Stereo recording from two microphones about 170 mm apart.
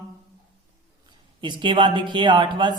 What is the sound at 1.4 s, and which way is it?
Speech, 30° right (ahead or behind).